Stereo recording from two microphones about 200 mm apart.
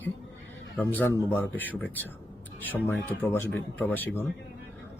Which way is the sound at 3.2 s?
10° left (ahead or behind).